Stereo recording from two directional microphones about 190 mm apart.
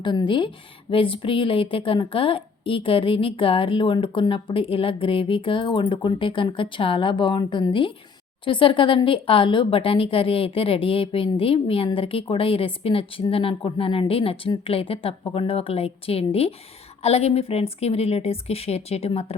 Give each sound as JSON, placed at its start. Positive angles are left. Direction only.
{"t": 0.0, "sound": "a woman's voice", "side_deg": 25}